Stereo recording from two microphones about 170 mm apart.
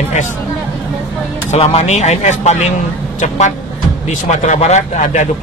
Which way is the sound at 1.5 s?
40° left (ahead or behind).